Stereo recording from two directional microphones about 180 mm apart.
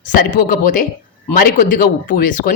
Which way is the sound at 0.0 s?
50° left (ahead or behind).